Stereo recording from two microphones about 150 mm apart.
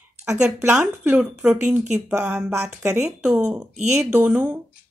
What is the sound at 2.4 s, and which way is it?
Speech, 20° right (ahead or behind).